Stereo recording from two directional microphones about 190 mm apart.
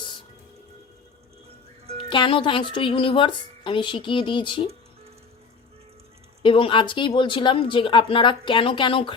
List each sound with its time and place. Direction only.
2.0 s speech: 25° left (ahead or behind)
6.4 s speech: 30° left (ahead or behind)